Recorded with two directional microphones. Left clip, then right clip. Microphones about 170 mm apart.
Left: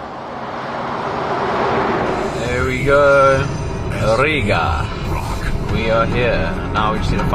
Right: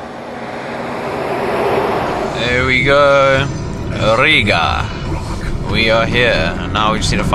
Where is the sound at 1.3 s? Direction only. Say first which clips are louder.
Right 2 dB; 55° right (ahead or behind).